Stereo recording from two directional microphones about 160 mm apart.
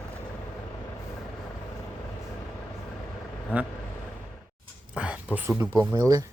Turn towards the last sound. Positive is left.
turn(degrees=15)  # may be behind; listen again after turning